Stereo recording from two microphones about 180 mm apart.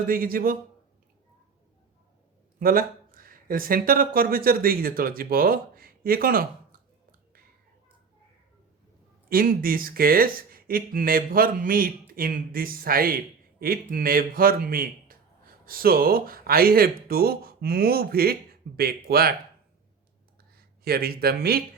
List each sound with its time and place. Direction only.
0.1 s speech: 55° right (ahead or behind)
2.6 s speech: 55° right (ahead or behind)
9.3 s speech: 55° right (ahead or behind)
20.6 s speech: 60° right (ahead or behind)